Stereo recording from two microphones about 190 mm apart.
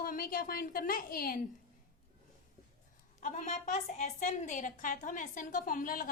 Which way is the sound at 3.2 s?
40° left (ahead or behind).